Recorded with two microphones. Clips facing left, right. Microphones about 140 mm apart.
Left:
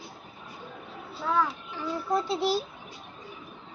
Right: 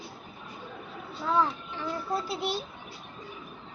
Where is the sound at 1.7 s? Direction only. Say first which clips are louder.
Left 3 dB; 20° left (ahead or behind).